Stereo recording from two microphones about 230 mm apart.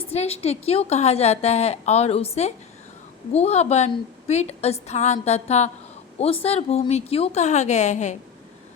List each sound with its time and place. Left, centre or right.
0.1 s a woman's voice: left